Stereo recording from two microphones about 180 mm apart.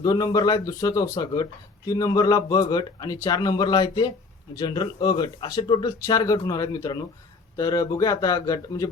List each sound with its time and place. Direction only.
0.0 s speech: 20° left (ahead or behind)